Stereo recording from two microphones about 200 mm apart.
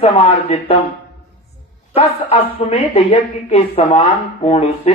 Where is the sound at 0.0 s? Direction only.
30° left (ahead or behind).